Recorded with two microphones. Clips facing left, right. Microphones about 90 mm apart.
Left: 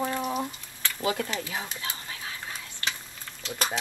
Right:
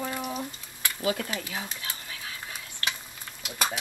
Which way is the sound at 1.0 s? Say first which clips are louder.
Even; 30° left (ahead or behind).